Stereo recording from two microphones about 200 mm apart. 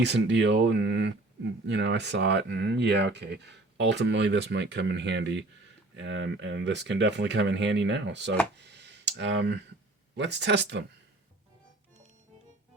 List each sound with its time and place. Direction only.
0.0 s speech: 60° right (ahead or behind)
8.5 s a sound: 60° right (ahead or behind)
10.2 s speech: 60° right (ahead or behind)